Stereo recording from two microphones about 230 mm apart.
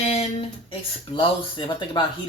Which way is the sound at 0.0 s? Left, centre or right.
Left.